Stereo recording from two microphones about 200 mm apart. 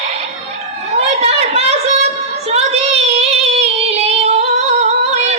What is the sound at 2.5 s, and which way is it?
Child singing, 30° right (ahead or behind).